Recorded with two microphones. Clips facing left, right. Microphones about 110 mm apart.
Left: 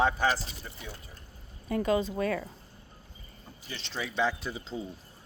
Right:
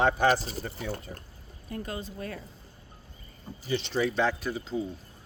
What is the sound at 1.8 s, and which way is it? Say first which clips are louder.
Speech: left 12 dB; 90° left.